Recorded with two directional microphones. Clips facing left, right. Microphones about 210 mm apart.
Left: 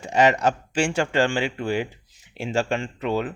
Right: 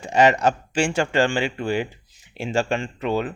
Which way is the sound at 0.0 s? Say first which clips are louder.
Right 2 dB; 30° right (ahead or behind).